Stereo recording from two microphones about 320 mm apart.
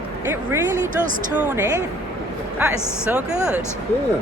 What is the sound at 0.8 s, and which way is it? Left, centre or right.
Speech, right.